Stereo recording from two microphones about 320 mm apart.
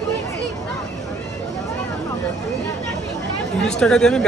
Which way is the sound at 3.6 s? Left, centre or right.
Centre.